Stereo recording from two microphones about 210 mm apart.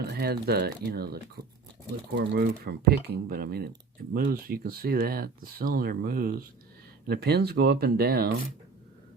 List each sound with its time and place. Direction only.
0.0 s speech: 50° right (ahead or behind)